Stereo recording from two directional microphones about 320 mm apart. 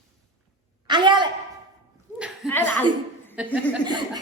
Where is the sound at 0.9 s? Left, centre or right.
Centre.